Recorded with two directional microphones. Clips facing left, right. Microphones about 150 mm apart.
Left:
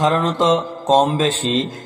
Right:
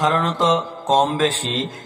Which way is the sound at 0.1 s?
20° left (ahead or behind).